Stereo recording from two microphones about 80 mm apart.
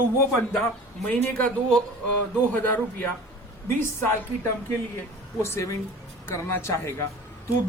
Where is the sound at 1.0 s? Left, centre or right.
Centre.